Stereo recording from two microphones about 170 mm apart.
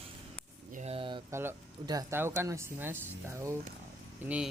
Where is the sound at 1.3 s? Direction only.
15° right (ahead or behind).